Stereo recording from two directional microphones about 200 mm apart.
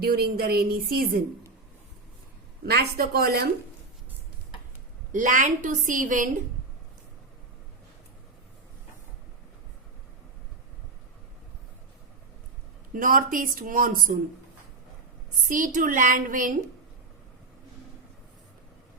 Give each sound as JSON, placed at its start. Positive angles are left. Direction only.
{"t": 0.0, "sound": "speech", "side_deg": -50}
{"t": 2.6, "sound": "speech", "side_deg": -50}
{"t": 5.1, "sound": "a woman's voice", "side_deg": -40}
{"t": 12.9, "sound": "speech", "side_deg": -45}
{"t": 15.4, "sound": "a woman's voice", "side_deg": -40}